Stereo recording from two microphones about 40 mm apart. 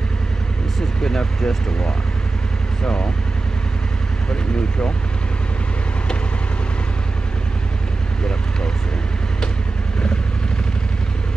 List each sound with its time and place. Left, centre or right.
1.0 s speech: centre
4.3 s speech: left